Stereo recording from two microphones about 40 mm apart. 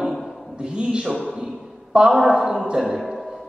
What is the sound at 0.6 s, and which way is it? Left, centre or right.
A man's voice, right.